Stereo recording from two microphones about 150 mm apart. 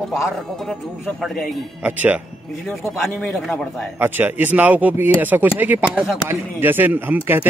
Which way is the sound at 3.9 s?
15° right (ahead or behind).